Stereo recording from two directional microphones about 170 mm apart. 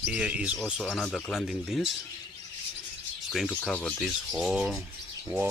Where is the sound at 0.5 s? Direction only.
5° left (ahead or behind).